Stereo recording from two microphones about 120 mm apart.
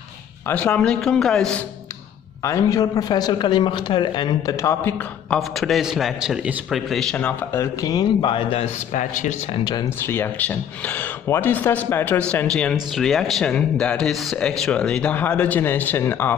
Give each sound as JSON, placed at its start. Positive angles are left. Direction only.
{"t": 0.5, "sound": "speech", "side_deg": 10}
{"t": 2.4, "sound": "a man's voice", "side_deg": 30}
{"t": 5.3, "sound": "a man's voice", "side_deg": 0}
{"t": 6.9, "sound": "a man's voice", "side_deg": 5}
{"t": 7.5, "sound": "a man's voice", "side_deg": 30}
{"t": 8.5, "sound": "a man's voice", "side_deg": 75}
{"t": 9.8, "sound": "speech", "side_deg": 20}